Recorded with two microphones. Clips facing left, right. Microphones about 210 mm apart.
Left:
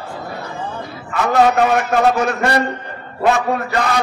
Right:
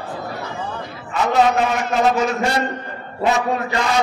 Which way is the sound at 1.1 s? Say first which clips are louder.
Left 2 dB; 60° left (ahead or behind).